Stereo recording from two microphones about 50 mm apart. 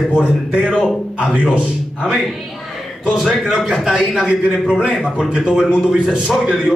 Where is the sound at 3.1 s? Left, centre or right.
Centre.